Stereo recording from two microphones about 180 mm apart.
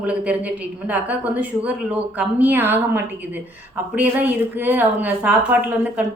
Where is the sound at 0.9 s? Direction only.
10° right (ahead or behind).